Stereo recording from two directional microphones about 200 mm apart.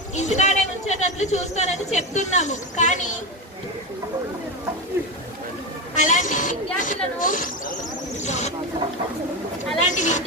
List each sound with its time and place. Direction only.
0.1 s a woman's voice: 35° left (ahead or behind)
5.9 s speech: 40° left (ahead or behind)
8.2 s a sound: 35° left (ahead or behind)
9.9 s a woman's voice: 35° left (ahead or behind)